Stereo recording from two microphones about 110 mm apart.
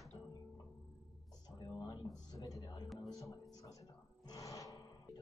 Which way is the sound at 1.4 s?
40° left (ahead or behind).